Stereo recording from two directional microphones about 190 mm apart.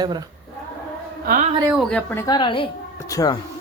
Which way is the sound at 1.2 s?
45° right (ahead or behind).